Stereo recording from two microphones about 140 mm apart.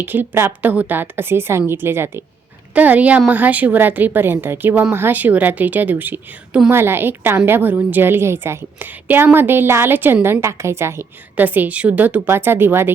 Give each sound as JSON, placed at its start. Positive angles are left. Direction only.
{"t": 0.0, "sound": "a woman's voice", "side_deg": -15}